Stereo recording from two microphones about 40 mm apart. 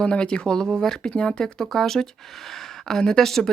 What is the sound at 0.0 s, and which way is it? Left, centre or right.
Speech, left.